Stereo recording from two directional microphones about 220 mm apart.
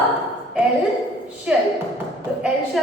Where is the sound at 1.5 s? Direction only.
5° right (ahead or behind).